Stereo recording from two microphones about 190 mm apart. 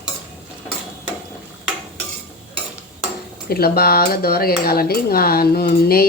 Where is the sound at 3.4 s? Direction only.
55° left (ahead or behind).